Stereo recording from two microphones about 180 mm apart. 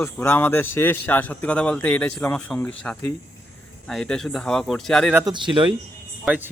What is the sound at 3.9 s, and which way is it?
Speech, 5° left (ahead or behind).